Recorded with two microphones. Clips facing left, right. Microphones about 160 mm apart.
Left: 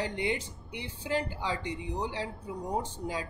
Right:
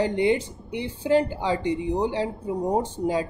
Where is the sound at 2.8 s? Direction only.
30° right (ahead or behind).